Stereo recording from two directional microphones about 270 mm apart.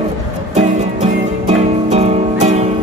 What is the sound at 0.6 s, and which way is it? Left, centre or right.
Music, right.